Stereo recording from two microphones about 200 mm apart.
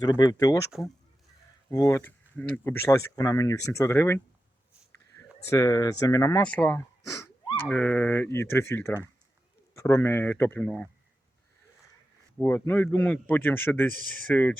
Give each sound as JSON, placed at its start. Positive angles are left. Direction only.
{"t": 0.0, "sound": "speech", "side_deg": 20}
{"t": 0.7, "sound": "speech", "side_deg": 0}
{"t": 1.7, "sound": "speech", "side_deg": 15}
{"t": 5.5, "sound": "speech", "side_deg": 20}
{"t": 6.4, "sound": "speech", "side_deg": 5}
{"t": 12.4, "sound": "speech", "side_deg": 10}